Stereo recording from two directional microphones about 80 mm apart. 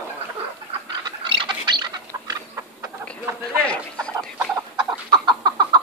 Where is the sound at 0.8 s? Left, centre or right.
Right.